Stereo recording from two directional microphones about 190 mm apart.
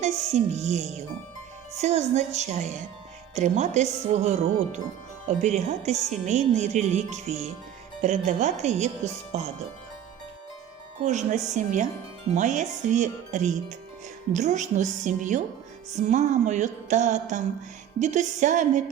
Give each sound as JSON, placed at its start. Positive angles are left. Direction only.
{"t": 0.0, "sound": "speech", "side_deg": -35}
{"t": 11.0, "sound": "speech", "side_deg": -40}